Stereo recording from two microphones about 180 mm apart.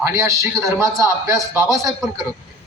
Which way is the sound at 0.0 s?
20° right (ahead or behind).